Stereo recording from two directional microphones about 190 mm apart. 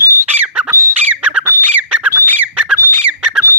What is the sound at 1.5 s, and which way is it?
Squawk, 15° right (ahead or behind).